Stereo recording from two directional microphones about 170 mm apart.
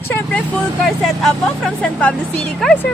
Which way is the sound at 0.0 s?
10° left (ahead or behind).